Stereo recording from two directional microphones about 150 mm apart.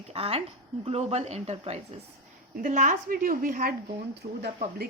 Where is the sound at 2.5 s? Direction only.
60° right (ahead or behind).